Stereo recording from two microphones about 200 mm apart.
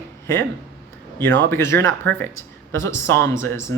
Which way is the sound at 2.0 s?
60° right (ahead or behind).